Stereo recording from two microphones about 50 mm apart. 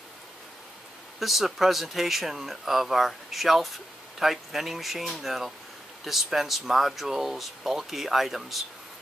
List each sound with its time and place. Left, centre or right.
1.2 s speech: centre